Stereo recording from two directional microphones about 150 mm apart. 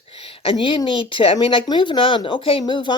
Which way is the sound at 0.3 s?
35° left (ahead or behind).